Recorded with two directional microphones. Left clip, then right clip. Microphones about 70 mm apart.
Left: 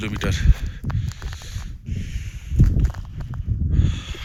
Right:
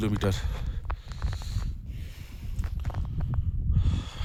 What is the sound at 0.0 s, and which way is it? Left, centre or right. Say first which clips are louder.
Speech: left 3 dB; right.